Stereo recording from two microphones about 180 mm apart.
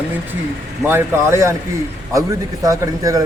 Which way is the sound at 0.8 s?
15° right (ahead or behind).